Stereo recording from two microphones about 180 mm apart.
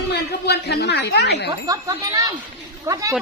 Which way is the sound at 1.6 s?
20° right (ahead or behind).